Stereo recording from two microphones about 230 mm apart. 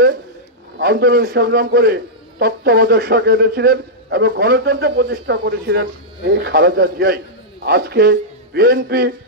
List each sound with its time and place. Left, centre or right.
0.7 s a man's voice: right